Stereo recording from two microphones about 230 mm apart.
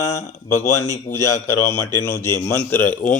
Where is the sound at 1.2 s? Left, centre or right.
Left.